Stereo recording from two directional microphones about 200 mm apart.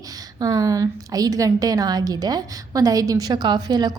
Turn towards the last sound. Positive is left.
turn(degrees=-20)  # may be behind; listen again after turning